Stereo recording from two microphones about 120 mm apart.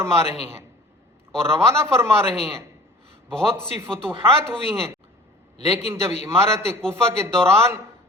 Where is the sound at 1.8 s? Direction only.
20° right (ahead or behind).